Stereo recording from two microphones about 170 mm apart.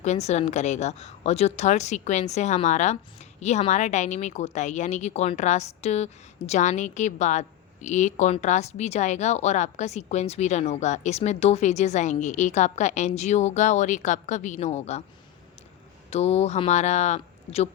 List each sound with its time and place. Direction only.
0.0 s a woman's voice: 40° left (ahead or behind)
16.0 s speech: 40° left (ahead or behind)